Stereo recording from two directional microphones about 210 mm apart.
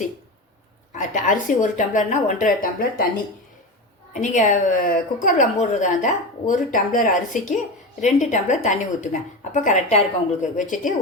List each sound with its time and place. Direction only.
0.9 s a woman's voice: 35° left (ahead or behind)
4.1 s a woman's voice: 35° left (ahead or behind)